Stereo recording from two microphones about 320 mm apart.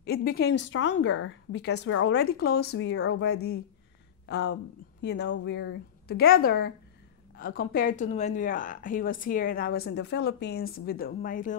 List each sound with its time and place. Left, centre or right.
0.0 s a woman's voice: left